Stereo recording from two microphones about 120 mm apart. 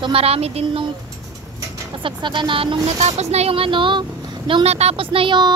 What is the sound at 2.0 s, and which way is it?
Speech, 40° right (ahead or behind).